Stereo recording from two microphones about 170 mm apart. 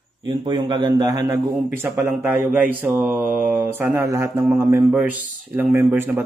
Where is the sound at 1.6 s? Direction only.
10° right (ahead or behind).